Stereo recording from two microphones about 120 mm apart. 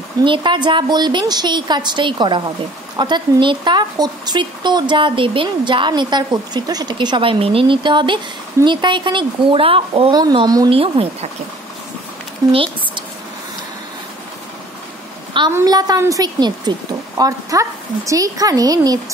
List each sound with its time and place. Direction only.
0.2 s a woman's voice: 40° right (ahead or behind)
10.3 s speech: 35° right (ahead or behind)
10.7 s a woman's voice: 50° right (ahead or behind)
12.5 s speech: 45° right (ahead or behind)
15.6 s speech: 30° right (ahead or behind)